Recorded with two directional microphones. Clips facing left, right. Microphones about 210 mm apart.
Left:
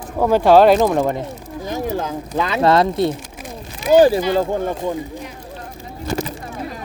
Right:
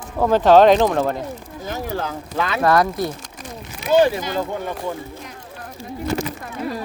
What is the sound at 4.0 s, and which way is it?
Speech, 35° left (ahead or behind).